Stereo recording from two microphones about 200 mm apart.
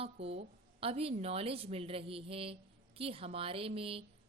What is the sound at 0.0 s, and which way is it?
A woman's voice, 30° right (ahead or behind).